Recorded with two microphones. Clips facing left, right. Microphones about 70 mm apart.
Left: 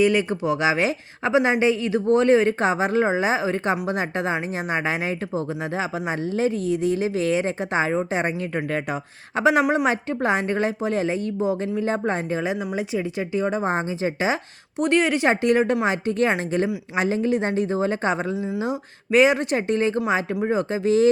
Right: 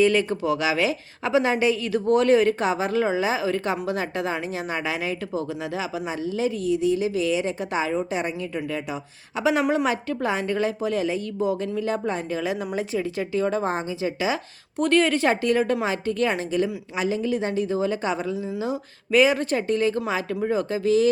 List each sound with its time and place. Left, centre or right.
0.0 s speech: centre; by 9.5 s left
9.5 s a woman's voice: left
12.5 s a woman's voice: centre
14.0 s speech: left
14.8 s a woman's voice: centre
15.3 s a woman's voice: left